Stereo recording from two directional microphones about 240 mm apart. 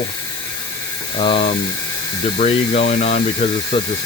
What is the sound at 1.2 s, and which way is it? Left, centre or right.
Speech, left.